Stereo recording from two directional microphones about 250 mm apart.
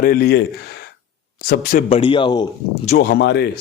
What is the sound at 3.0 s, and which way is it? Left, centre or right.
Speech, left.